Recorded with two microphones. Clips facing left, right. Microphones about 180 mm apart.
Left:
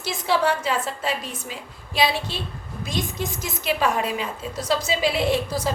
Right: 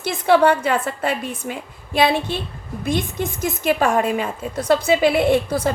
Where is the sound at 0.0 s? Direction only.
60° right (ahead or behind).